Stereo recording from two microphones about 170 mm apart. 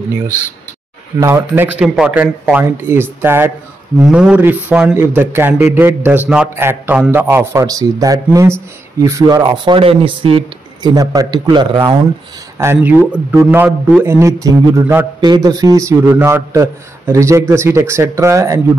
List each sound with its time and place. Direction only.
1.2 s a man's voice: 15° right (ahead or behind)
12.5 s a man's voice: 15° right (ahead or behind)